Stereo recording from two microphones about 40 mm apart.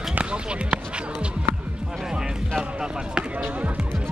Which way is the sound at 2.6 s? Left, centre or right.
Centre.